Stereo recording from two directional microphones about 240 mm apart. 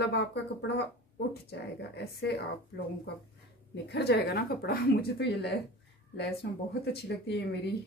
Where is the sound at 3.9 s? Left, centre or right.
Left.